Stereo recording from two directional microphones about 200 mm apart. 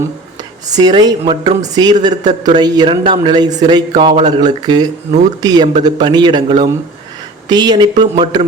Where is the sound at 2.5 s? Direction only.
20° right (ahead or behind).